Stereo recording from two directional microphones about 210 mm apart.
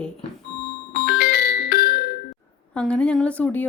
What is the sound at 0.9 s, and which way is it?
Music, 45° left (ahead or behind).